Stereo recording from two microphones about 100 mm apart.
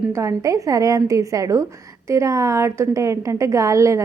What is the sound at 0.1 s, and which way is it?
A woman's voice, 30° right (ahead or behind).